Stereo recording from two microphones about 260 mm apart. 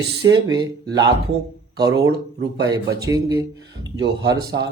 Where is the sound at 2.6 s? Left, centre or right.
Centre.